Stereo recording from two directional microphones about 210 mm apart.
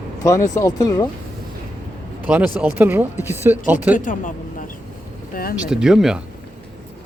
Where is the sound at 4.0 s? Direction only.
40° left (ahead or behind).